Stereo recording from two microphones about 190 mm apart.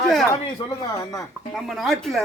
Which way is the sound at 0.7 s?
15° left (ahead or behind).